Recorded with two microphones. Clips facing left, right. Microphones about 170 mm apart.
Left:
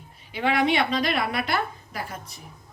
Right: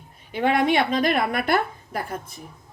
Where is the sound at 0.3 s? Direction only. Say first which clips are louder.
Right 2 dB; 50° right (ahead or behind).